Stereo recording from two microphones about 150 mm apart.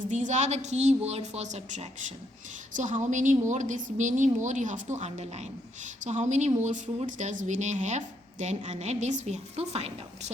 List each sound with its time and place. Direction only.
0.0 s a woman's voice: 55° right (ahead or behind)